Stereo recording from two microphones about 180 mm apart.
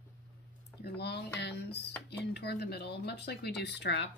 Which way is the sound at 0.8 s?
65° left (ahead or behind).